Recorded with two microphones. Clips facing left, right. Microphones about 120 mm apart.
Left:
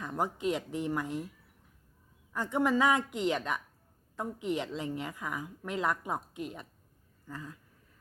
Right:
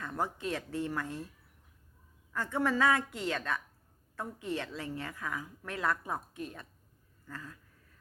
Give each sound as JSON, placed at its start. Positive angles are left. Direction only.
{"t": 0.0, "sound": "a woman's voice", "side_deg": 15}
{"t": 2.3, "sound": "a woman's voice", "side_deg": 15}